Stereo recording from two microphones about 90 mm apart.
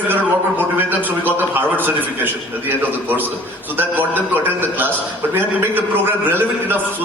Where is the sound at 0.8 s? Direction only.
20° right (ahead or behind).